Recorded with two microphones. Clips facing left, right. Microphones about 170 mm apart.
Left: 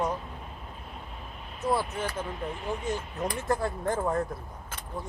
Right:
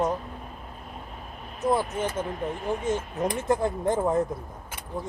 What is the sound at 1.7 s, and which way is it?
Speech, 20° right (ahead or behind).